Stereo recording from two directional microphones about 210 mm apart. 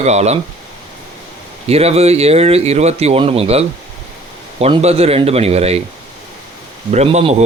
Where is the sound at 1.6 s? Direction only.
30° right (ahead or behind).